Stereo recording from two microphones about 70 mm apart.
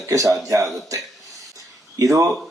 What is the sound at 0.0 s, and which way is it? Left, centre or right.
Speech, right.